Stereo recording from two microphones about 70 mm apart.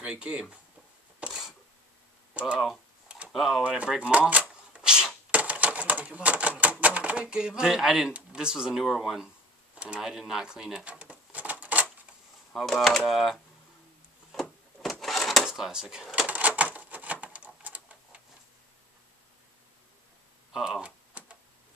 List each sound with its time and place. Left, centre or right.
0.0 s speech: centre
1.2 s camera: centre
3.3 s speech: centre
3.6 s speech: centre
4.0 s typewriter: centre
5.4 s speech: right
10.9 s a sound: centre
12.5 s speech: centre
14.4 s drawer open or close: centre
16.3 s typewriter: right
17.6 s a sound: centre
20.5 s speech: centre
20.8 s typing: centre